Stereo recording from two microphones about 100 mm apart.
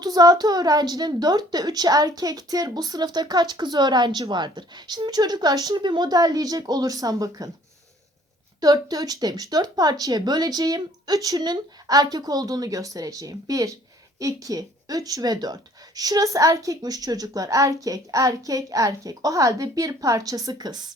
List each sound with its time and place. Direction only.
0.0 s speech: 40° right (ahead or behind)
8.6 s speech: 40° right (ahead or behind)